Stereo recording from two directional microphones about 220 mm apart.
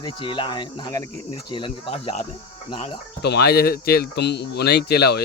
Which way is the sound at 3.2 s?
50° left (ahead or behind).